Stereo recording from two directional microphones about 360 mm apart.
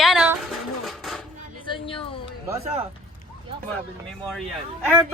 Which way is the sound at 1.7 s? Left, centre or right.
Centre.